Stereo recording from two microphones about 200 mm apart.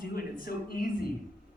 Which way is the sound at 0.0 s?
45° left (ahead or behind).